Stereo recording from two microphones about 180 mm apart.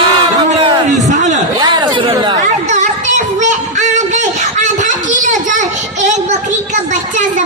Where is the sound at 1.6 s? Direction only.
25° right (ahead or behind).